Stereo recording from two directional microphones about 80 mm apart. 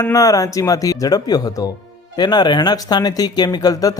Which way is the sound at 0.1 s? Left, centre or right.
Left.